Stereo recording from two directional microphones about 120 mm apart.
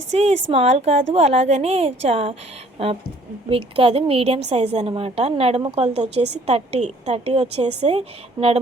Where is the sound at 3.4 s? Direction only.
50° right (ahead or behind).